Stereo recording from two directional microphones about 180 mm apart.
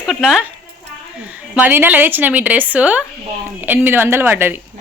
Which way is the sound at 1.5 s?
10° right (ahead or behind).